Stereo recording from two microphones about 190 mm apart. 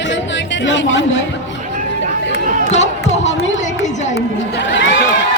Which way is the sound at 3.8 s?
40° left (ahead or behind).